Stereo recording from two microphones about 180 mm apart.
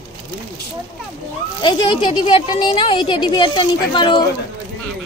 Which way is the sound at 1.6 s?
25° left (ahead or behind).